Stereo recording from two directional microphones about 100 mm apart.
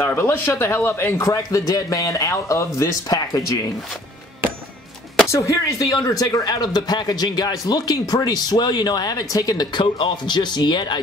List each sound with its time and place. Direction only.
0.0 s speech: 20° left (ahead or behind)
5.3 s speech: 30° left (ahead or behind); by 11.0 s 50° left (ahead or behind)